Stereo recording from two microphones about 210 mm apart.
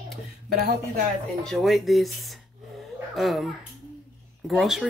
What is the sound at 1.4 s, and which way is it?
A child's voice, centre (ahead or behind).